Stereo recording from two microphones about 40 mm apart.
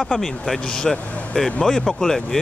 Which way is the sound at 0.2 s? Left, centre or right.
Centre.